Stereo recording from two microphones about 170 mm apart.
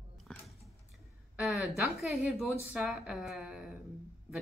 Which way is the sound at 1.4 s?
Centre (ahead or behind).